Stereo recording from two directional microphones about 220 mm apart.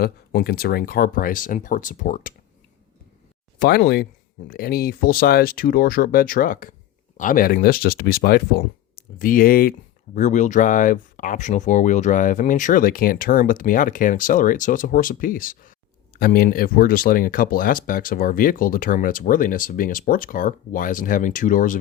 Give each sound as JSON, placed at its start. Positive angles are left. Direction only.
{"t": 0.0, "sound": "speech", "side_deg": 45}
{"t": 3.6, "sound": "speech", "side_deg": 45}